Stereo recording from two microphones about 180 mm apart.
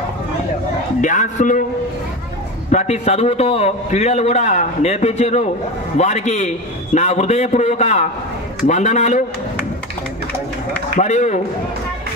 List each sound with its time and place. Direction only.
1.0 s speech: 45° left (ahead or behind)
2.7 s a man's voice: 40° left (ahead or behind)
11.0 s a man's voice: 40° left (ahead or behind)